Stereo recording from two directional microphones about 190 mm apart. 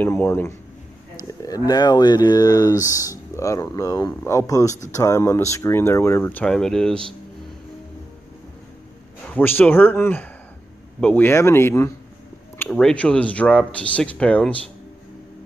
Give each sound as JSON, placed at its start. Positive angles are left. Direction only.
{"t": 0.0, "sound": "speech", "side_deg": 10}
{"t": 9.2, "sound": "speech", "side_deg": 10}